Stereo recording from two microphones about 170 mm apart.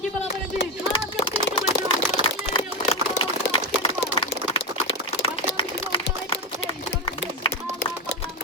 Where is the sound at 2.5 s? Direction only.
30° left (ahead or behind).